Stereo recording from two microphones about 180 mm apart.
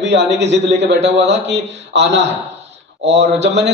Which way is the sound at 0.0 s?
70° right (ahead or behind).